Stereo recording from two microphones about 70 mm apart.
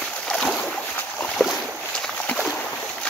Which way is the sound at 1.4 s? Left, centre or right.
Left.